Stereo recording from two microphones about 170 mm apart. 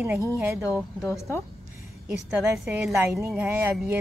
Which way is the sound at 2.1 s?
5° right (ahead or behind).